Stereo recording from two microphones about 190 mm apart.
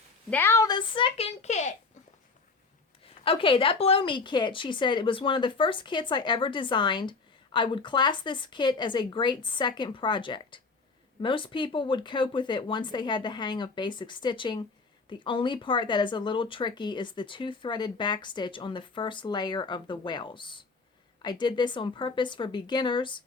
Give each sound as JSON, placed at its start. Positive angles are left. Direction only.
{"t": 0.3, "sound": "speech", "side_deg": 10}
{"t": 3.2, "sound": "speech", "side_deg": 30}